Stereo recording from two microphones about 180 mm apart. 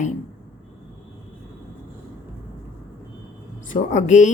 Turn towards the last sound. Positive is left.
turn(degrees=45)  # may be behind; listen again after turning